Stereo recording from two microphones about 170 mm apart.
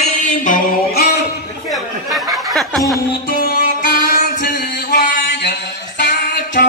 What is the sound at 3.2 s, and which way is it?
Music, 65° left (ahead or behind).